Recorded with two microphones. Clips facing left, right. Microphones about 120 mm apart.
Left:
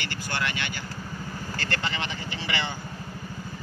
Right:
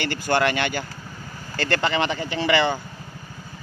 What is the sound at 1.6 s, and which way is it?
Speech, 80° right.